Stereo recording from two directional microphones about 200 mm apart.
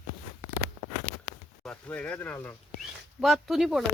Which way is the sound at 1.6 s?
5° left (ahead or behind).